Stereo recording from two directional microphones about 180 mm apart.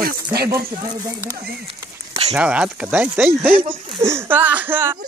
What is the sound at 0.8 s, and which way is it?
Speech, 20° right (ahead or behind).